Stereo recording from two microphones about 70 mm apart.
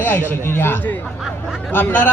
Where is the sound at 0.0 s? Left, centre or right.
Left.